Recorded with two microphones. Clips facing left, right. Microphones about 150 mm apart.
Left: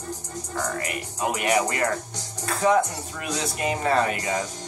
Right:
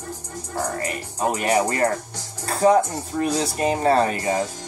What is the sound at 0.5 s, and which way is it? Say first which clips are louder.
Speech: right 3 dB; 35° right (ahead or behind).